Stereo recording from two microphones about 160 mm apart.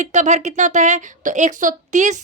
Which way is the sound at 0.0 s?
45° right (ahead or behind).